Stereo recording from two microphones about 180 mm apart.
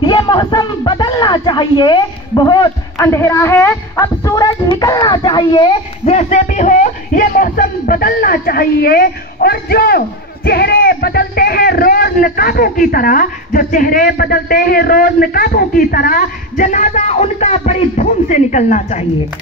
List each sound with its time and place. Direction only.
0.0 s speech: 25° left (ahead or behind); by 19.0 s 40° left (ahead or behind)